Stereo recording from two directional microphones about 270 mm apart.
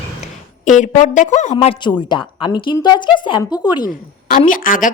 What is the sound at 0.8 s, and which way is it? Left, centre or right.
A woman's voice, left.